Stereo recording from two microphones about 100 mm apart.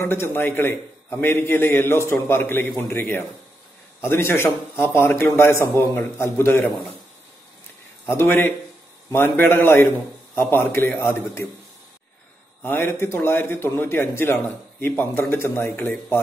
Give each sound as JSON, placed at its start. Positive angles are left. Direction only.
{"t": 0.1, "sound": "a man's voice", "side_deg": 20}
{"t": 8.1, "sound": "a man's voice", "side_deg": 20}
{"t": 12.6, "sound": "a man's voice", "side_deg": 20}